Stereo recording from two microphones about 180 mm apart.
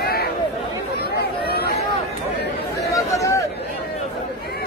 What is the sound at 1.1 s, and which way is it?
Chatter, 60° left (ahead or behind).